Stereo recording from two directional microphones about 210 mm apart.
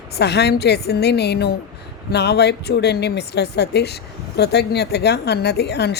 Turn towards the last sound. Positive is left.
turn(degrees=50)  # may be behind; listen again after turning